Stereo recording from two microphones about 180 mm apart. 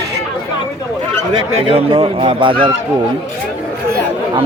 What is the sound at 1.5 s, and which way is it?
Speech, 30° right (ahead or behind).